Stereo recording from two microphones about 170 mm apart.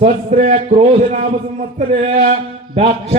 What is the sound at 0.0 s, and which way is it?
A man's voice, 45° right (ahead or behind).